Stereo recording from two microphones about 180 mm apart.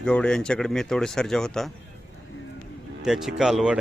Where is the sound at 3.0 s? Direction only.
Centre (ahead or behind).